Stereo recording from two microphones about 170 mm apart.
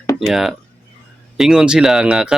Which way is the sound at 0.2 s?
Centre (ahead or behind).